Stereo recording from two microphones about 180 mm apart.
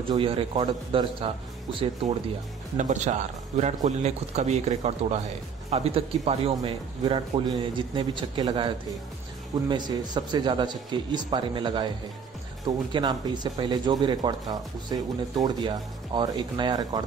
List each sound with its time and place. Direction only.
0.1 s speech: 30° right (ahead or behind)
2.8 s a man's voice: 45° right (ahead or behind); by 17.0 s 25° right (ahead or behind)